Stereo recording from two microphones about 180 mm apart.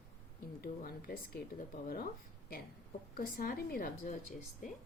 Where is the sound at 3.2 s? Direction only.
55° left (ahead or behind).